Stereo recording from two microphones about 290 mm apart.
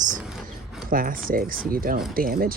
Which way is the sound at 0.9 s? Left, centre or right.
Right.